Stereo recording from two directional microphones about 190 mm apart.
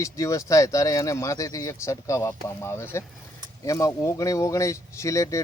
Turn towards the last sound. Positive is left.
turn(degrees=15)  # may be behind; listen again after turning